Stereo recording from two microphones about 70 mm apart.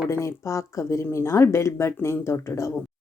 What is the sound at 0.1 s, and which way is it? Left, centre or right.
Speech, left.